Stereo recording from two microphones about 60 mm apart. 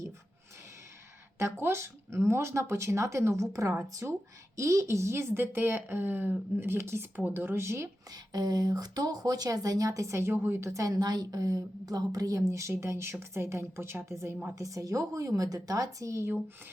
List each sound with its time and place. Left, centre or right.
1.4 s speech: right
4.0 s speech: right
4.5 s speech: right
7.3 s speech: right
7.5 s speech: right
8.1 s a woman's voice: right
14.5 s a woman's voice: right